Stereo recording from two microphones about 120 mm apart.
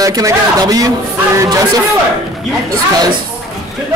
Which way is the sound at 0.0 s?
30° right (ahead or behind).